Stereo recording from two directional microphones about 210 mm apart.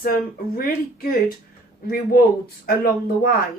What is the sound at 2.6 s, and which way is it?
Speech, 45° left (ahead or behind).